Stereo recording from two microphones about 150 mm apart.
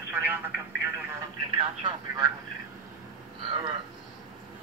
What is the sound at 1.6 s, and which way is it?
Speech, 30° right (ahead or behind).